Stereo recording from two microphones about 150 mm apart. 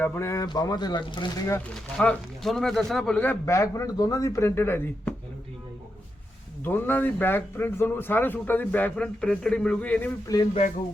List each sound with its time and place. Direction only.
0.0 s speech: 15° left (ahead or behind)
2.0 s speech: 5° left (ahead or behind)
6.7 s speech: 15° left (ahead or behind)
10.3 s speech: 25° left (ahead or behind)